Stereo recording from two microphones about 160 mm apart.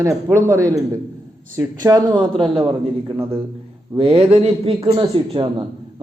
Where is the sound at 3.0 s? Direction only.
15° right (ahead or behind).